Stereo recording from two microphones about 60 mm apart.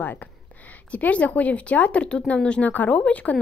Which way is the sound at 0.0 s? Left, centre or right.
Left.